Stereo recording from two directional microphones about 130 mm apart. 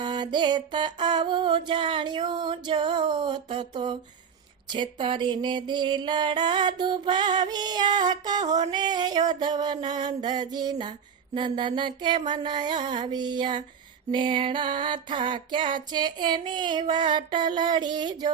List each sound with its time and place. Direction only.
0.0 s music: 35° right (ahead or behind)